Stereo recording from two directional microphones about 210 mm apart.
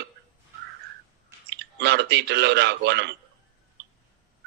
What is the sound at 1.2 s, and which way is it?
Speech, 55° right (ahead or behind).